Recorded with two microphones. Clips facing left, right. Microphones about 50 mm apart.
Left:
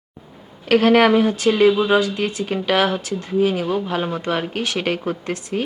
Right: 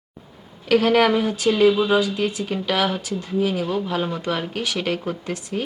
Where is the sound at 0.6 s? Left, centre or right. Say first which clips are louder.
Left 3 dB; left.